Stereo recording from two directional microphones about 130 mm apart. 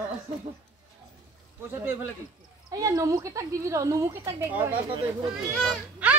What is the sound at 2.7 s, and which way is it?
A woman's voice, 25° right (ahead or behind).